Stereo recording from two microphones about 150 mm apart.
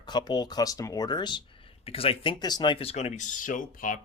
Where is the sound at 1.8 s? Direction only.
40° left (ahead or behind); by 4.0 s 65° left (ahead or behind).